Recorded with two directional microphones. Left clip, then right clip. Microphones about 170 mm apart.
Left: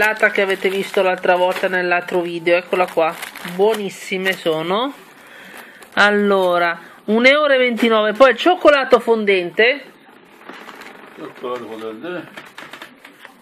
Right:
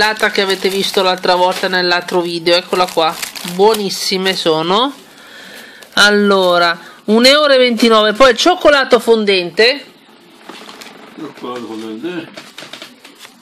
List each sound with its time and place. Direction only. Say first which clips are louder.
0.0 s speech: right 2 dB; 10° right (ahead or behind)
5.9 s speech: right 4 dB; 25° right (ahead or behind)